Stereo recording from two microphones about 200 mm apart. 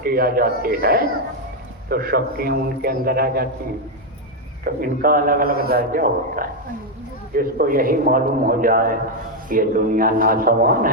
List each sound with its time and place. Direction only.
0.0 s a man's voice: 50° right (ahead or behind)
4.6 s a man's voice: 45° right (ahead or behind)